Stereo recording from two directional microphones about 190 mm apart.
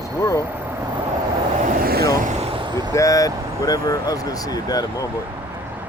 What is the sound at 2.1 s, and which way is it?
Vehicle, 45° right (ahead or behind).